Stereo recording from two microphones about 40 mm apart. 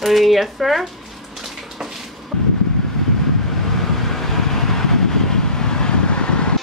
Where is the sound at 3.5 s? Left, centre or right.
Centre; by 6.5 s left.